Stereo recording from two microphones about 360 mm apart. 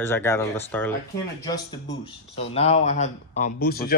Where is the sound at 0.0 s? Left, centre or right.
Centre.